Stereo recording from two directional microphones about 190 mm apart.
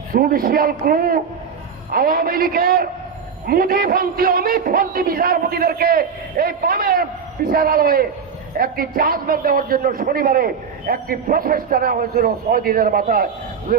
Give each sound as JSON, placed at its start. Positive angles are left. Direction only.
{"t": 0.1, "sound": "a man's voice", "side_deg": -50}